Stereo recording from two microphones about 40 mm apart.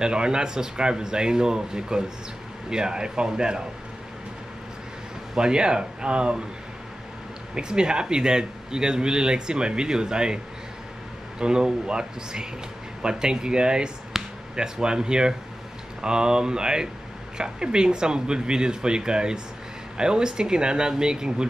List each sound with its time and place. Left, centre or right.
0.0 s speech: right
5.3 s speech: centre
7.5 s speech: centre
14.1 s a sound: centre
14.5 s speech: centre